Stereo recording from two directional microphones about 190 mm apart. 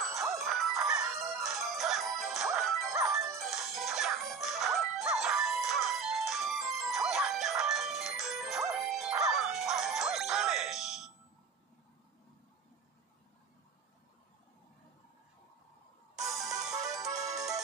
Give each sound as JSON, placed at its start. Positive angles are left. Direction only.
{"t": 0.1, "sound": "music", "side_deg": 0}
{"t": 16.2, "sound": "music", "side_deg": 0}
{"t": 17.3, "sound": "music", "side_deg": -20}